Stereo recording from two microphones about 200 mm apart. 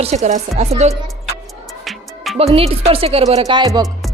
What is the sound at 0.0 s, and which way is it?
Speech, 35° right (ahead or behind).